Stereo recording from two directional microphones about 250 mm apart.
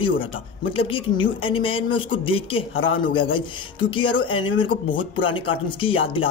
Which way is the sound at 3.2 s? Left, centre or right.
Centre.